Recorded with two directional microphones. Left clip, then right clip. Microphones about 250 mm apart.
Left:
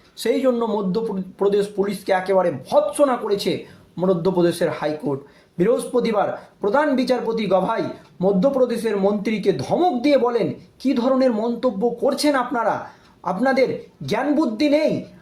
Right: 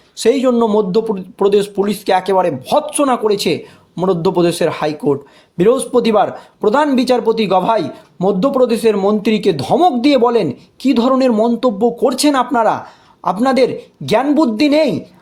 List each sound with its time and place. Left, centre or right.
0.2 s speech: right